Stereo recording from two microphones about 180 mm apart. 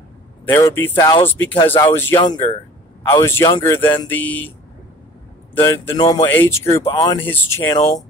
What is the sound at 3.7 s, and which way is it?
Speech, 10° left (ahead or behind).